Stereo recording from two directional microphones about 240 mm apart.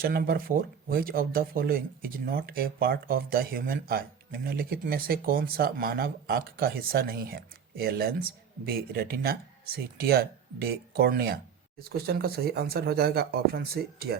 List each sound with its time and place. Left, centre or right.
0.0 s speech: right